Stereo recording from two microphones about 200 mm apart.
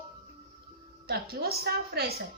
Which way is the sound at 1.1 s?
50° right (ahead or behind).